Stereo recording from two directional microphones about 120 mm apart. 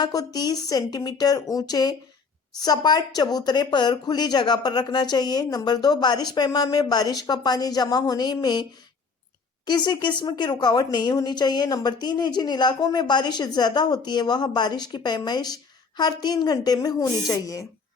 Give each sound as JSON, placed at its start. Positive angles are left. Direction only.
{"t": 0.0, "sound": "a woman's voice", "side_deg": 30}
{"t": 9.6, "sound": "a woman's voice", "side_deg": 40}